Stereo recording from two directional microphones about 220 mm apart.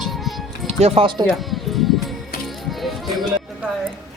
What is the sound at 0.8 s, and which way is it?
Speech, 25° right (ahead or behind).